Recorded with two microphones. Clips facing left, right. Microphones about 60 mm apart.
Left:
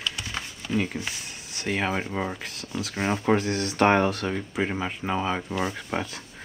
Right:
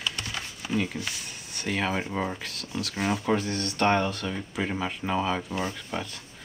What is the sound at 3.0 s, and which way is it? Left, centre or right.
Speech, left.